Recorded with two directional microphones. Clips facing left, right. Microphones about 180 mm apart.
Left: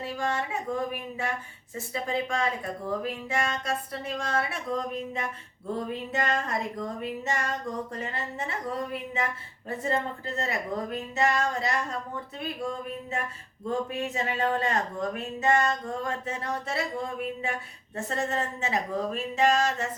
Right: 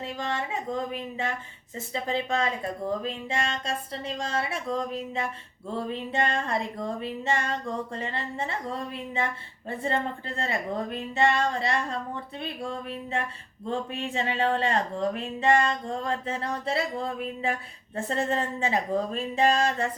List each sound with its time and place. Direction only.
0.0 s speech: 25° right (ahead or behind)